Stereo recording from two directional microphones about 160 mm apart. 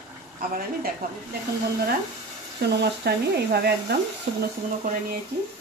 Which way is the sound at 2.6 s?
90° right.